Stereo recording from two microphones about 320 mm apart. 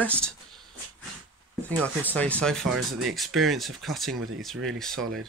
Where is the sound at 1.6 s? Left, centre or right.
Centre.